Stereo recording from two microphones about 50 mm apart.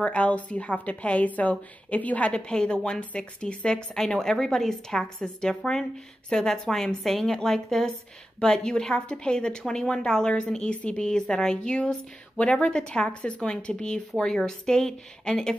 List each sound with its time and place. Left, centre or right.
0.0 s a woman's voice: left